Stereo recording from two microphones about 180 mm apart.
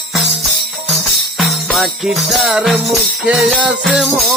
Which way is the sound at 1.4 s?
Centre (ahead or behind).